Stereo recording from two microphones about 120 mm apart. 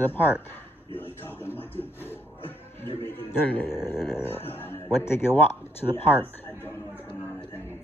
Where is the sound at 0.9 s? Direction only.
15° left (ahead or behind).